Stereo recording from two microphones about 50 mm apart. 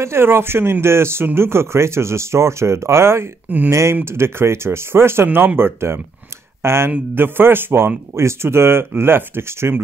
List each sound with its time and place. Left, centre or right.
0.0 s speech: right
3.4 s speech: right
3.9 s speech: right
5.6 s speech: right
7.2 s speech: right
8.2 s speech: right